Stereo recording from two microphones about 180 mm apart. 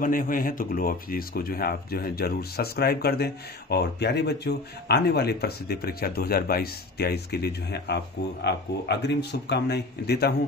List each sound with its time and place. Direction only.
0.0 s speech: 50° left (ahead or behind)